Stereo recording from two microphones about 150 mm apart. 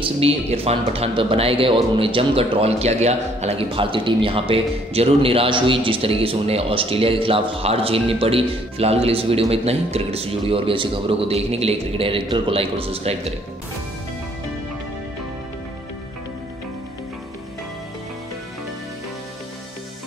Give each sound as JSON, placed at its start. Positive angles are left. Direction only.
{"t": 0.0, "sound": "speech", "side_deg": -45}